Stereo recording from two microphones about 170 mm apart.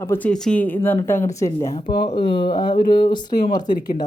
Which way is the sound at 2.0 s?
30° left (ahead or behind).